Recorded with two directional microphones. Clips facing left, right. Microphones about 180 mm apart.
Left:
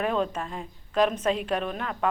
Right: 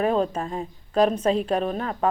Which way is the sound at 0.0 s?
35° right (ahead or behind).